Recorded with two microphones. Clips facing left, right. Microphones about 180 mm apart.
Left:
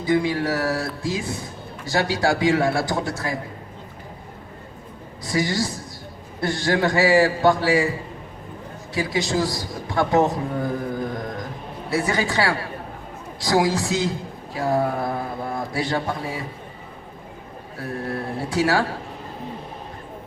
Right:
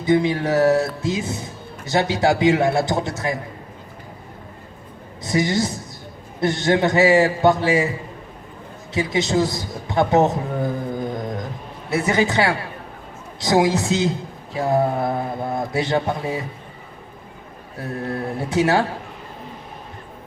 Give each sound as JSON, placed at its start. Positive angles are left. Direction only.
{"t": 0.0, "sound": "a man's voice", "side_deg": -20}
{"t": 5.2, "sound": "a man's voice", "side_deg": -20}
{"t": 8.9, "sound": "a man's voice", "side_deg": -20}
{"t": 10.9, "sound": "mantra", "side_deg": -20}
{"t": 11.9, "sound": "a man's voice", "side_deg": -20}
{"t": 18.1, "sound": "a man's voice", "side_deg": -20}